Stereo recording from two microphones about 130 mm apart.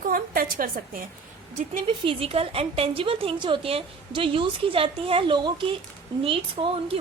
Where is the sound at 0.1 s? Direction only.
90° right.